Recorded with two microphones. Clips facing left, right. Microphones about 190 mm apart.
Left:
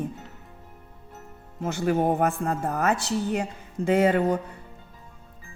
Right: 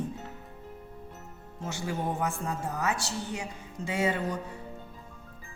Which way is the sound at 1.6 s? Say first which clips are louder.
Left 10 dB; 60° left (ahead or behind).